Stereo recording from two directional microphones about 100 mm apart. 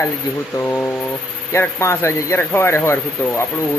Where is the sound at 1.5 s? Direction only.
25° left (ahead or behind).